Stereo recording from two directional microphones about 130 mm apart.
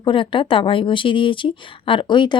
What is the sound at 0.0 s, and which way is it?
Speech, 40° left (ahead or behind).